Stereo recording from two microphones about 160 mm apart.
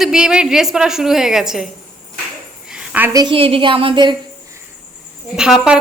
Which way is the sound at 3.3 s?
35° right (ahead or behind).